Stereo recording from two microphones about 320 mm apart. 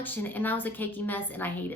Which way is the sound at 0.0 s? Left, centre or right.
Centre.